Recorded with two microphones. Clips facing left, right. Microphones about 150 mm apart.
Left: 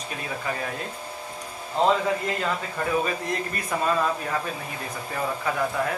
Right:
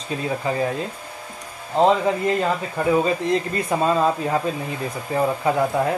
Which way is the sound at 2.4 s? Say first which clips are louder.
Right 5 dB; 25° right (ahead or behind).